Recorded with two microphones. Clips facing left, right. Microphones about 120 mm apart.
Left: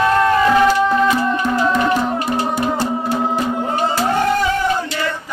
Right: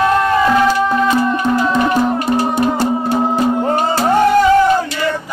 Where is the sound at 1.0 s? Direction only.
20° right (ahead or behind).